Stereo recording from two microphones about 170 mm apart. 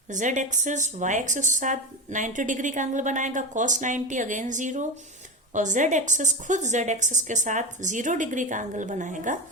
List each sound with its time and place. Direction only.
0.1 s a woman's voice: 45° right (ahead or behind)